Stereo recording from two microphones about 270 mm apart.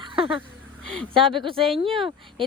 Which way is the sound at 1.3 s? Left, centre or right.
Centre.